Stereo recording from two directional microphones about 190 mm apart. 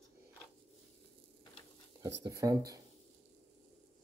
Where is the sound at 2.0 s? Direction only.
15° right (ahead or behind).